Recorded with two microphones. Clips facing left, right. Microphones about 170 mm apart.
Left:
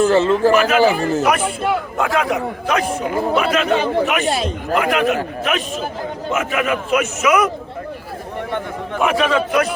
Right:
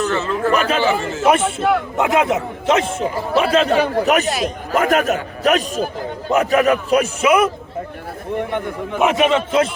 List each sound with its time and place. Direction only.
0.0 s a man's voice: 30° left (ahead or behind)
0.5 s a man's voice: 30° right (ahead or behind)
0.8 s a man's voice: 40° left (ahead or behind)
1.2 s a man's voice: 25° right (ahead or behind)
4.3 s a man's voice: 30° left (ahead or behind)
4.7 s a man's voice: 45° right (ahead or behind); by 7.5 s 30° right (ahead or behind)
8.5 s a man's voice: 15° right (ahead or behind)